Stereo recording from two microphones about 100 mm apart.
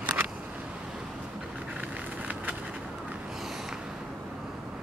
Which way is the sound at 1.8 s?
15° right (ahead or behind).